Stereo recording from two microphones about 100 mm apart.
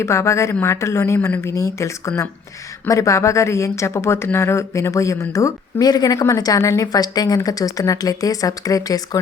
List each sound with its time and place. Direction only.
0.0 s a woman's voice: 30° left (ahead or behind)